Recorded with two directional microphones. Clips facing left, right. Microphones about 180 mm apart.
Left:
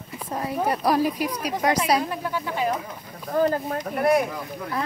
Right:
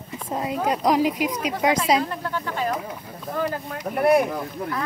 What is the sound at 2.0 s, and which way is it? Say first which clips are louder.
Speech: even; 10° left (ahead or behind).